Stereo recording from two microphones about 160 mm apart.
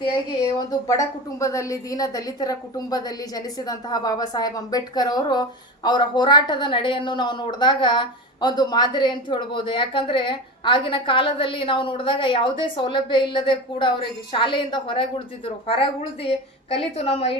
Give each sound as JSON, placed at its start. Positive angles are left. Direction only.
{"t": 0.7, "sound": "a woman's voice", "side_deg": 20}